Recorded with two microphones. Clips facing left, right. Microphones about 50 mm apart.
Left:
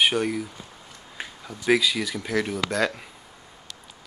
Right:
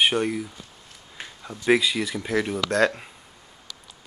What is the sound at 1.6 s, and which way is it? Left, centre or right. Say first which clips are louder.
Speech: right 1 dB; centre.